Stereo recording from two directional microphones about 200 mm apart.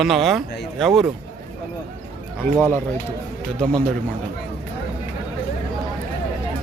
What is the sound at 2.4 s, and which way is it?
Speech, 10° left (ahead or behind).